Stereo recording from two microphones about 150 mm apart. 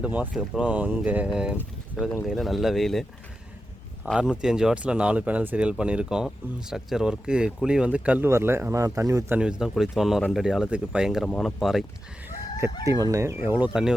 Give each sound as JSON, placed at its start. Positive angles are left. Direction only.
{"t": 0.0, "sound": "speech", "side_deg": -10}
{"t": 9.4, "sound": "speech", "side_deg": -5}
{"t": 12.8, "sound": "speech", "side_deg": -20}